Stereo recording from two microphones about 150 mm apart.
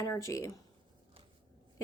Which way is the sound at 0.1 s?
20° left (ahead or behind).